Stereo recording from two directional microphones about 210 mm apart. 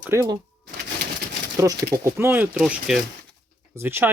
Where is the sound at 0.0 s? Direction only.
15° right (ahead or behind).